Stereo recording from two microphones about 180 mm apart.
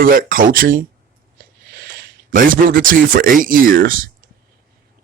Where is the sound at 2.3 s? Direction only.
50° right (ahead or behind).